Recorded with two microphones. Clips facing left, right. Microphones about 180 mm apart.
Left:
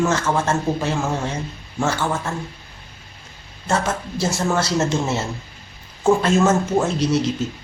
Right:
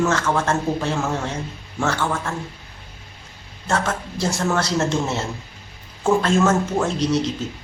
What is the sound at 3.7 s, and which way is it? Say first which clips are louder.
Speech: left 1 dB; 5° left (ahead or behind).